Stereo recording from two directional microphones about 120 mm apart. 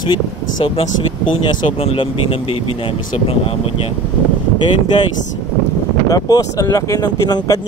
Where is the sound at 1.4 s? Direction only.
50° left (ahead or behind).